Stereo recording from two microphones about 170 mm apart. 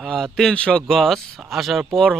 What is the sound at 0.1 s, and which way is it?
Speech, 5° left (ahead or behind).